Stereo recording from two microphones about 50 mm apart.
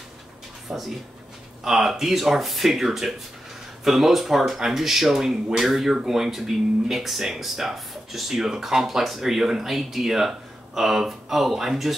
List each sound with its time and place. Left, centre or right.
0.7 s speech: centre